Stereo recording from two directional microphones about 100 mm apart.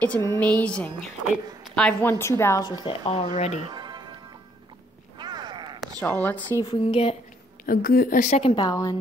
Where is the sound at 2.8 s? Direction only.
70° left (ahead or behind).